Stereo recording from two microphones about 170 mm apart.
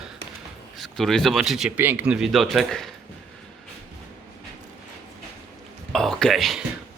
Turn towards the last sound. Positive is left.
turn(degrees=0)  # may be behind; listen again after turning